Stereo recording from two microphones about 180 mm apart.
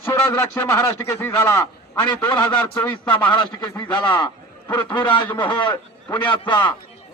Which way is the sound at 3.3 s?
25° left (ahead or behind).